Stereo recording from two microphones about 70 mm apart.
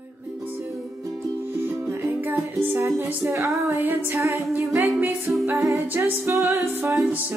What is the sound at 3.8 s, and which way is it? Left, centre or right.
Music, right.